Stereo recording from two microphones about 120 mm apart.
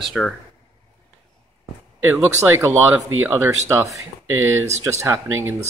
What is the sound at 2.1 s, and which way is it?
Speech, 20° right (ahead or behind).